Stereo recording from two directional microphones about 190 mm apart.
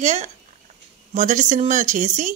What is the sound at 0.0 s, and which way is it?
Speech, 40° right (ahead or behind).